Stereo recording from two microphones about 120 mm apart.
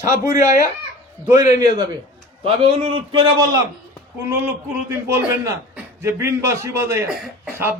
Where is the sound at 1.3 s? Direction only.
90° left.